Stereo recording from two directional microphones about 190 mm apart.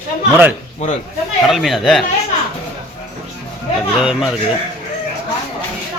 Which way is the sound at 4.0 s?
5° right (ahead or behind).